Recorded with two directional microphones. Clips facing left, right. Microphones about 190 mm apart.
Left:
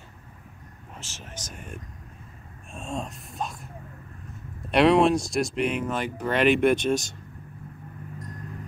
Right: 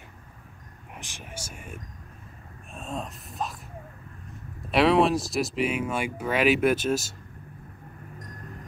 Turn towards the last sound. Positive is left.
turn(degrees=-5)  # may be behind; listen again after turning